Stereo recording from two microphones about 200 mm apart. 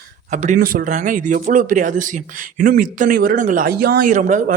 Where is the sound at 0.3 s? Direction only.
40° right (ahead or behind).